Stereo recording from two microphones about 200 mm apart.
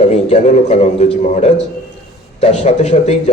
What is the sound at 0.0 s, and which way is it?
A man's voice, 35° left (ahead or behind).